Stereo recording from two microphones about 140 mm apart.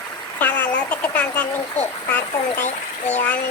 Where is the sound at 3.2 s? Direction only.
10° left (ahead or behind).